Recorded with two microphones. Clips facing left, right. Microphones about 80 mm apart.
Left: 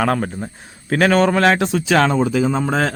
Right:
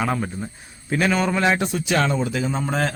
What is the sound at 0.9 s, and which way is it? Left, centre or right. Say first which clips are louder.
A man's voice: left 6 dB; left.